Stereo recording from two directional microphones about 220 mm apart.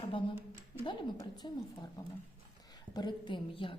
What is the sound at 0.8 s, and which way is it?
A woman's voice, 20° left (ahead or behind).